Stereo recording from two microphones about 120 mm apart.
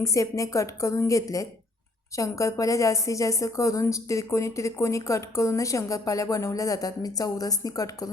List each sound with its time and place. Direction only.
0.0 s a woman's voice: 25° left (ahead or behind)